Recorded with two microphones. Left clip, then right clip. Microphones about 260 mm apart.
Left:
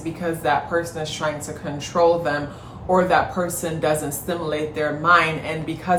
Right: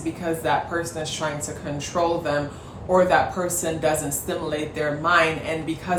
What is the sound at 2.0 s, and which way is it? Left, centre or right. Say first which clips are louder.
Speech: left 4 dB; centre.